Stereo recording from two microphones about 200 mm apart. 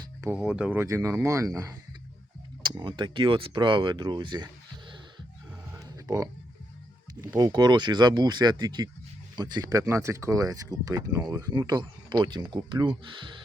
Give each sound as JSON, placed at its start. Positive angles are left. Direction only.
{"t": 0.2, "sound": "speech", "side_deg": -5}
{"t": 2.6, "sound": "speech", "side_deg": -20}
{"t": 5.7, "sound": "a sound", "side_deg": -15}
{"t": 7.2, "sound": "speech", "side_deg": -20}